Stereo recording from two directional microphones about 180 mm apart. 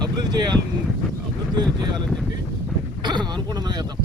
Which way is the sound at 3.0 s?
25° right (ahead or behind).